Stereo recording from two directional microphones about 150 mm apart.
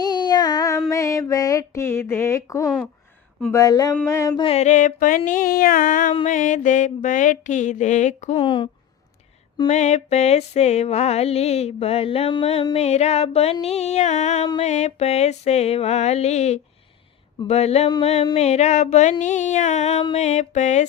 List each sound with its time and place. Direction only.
0.0 s child singing: 30° left (ahead or behind)
0.9 s female singing: 20° left (ahead or behind)
3.5 s a sound: 25° left (ahead or behind)
3.9 s music: 15° left (ahead or behind)
4.4 s mantra: 40° left (ahead or behind)
8.4 s speech: 35° left (ahead or behind)
9.6 s music: 50° left (ahead or behind)
19.2 s mantra: 55° left (ahead or behind)
20.1 s music: 50° left (ahead or behind)